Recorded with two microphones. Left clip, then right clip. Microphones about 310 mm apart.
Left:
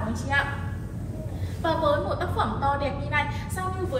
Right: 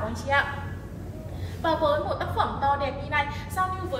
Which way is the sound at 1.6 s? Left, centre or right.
Right.